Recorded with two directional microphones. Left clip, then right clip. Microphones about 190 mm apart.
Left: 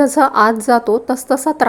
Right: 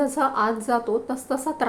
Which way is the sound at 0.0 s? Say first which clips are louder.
Left 10 dB; 40° left (ahead or behind).